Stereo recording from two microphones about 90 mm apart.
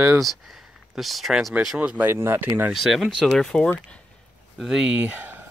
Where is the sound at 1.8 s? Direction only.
15° right (ahead or behind).